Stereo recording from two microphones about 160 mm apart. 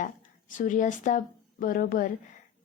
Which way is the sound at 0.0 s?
55° left (ahead or behind).